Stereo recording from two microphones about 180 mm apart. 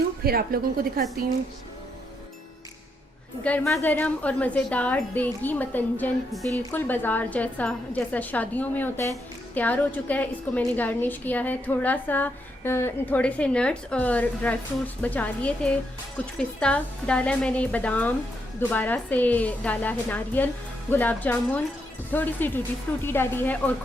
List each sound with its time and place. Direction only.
0.3 s a woman's voice: 55° right (ahead or behind)
3.4 s a woman's voice: 5° left (ahead or behind)